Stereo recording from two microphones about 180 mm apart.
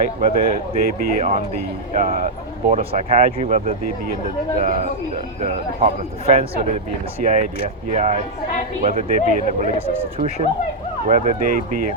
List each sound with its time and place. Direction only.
0.2 s speech: 55° right (ahead or behind)
1.2 s speech: 40° right (ahead or behind)
11.1 s speech: 45° right (ahead or behind)